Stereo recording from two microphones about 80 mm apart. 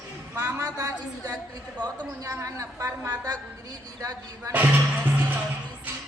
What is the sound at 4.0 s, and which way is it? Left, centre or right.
Speech, right.